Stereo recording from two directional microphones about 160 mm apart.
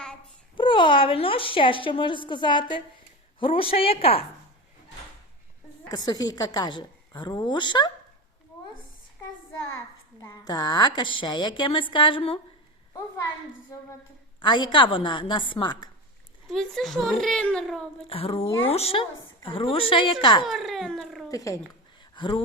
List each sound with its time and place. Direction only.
0.5 s a woman's voice: 30° left (ahead or behind)
5.9 s a woman's voice: 25° left (ahead or behind)
10.2 s a woman's voice: 25° left (ahead or behind)
14.3 s a woman's voice: 30° left (ahead or behind)
16.5 s a child's voice: centre (ahead or behind)
18.1 s a woman's voice: 40° left (ahead or behind)
20.4 s a child's voice: centre (ahead or behind)
21.2 s a woman's voice: 20° left (ahead or behind)